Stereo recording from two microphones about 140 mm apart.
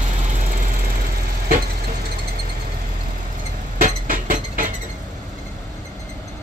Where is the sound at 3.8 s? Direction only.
75° right (ahead or behind).